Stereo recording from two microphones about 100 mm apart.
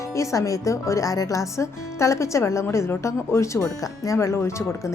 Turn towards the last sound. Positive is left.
turn(degrees=25)  # may be behind; listen again after turning